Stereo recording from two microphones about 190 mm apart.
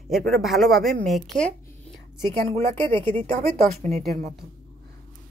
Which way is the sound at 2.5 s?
30° right (ahead or behind).